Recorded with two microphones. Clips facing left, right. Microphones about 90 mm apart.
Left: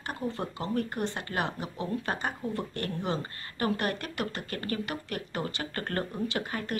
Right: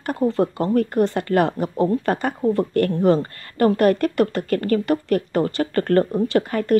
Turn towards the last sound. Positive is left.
turn(degrees=-50)  # may be behind; listen again after turning